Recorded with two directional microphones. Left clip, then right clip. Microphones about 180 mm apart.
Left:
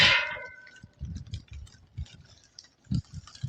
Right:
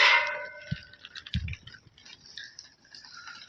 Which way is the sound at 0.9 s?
65° left (ahead or behind).